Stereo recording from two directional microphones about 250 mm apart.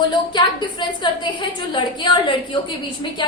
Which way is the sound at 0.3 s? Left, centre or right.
Centre.